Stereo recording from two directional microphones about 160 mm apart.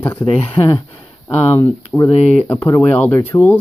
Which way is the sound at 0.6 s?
20° left (ahead or behind).